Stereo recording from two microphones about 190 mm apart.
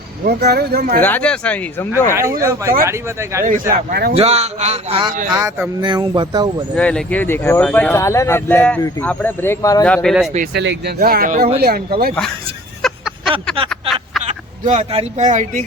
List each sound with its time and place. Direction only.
0.3 s speech: 55° right (ahead or behind)
1.0 s speech: 10° left (ahead or behind)
2.4 s speech: 15° right (ahead or behind)
3.4 s speech: 45° right (ahead or behind)
4.1 s a man's voice: 35° right (ahead or behind)
5.3 s speech: 15° right (ahead or behind)
6.7 s speech: 5° left (ahead or behind)
9.8 s speech: 5° left (ahead or behind)
10.5 s speech: 65° right (ahead or behind)
12.8 s a sound: centre (ahead or behind)
14.3 s speech: 35° right (ahead or behind)